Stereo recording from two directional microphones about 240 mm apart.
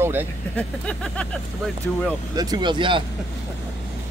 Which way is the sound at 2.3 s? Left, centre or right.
Centre.